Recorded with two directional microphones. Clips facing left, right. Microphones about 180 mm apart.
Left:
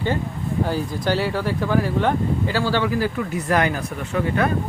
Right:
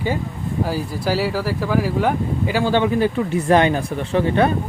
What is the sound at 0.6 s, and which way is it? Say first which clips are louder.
Speech: right 1 dB; 5° right (ahead or behind).